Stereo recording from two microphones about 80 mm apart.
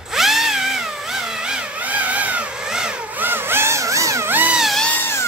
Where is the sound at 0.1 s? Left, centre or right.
Centre; by 4.3 s right.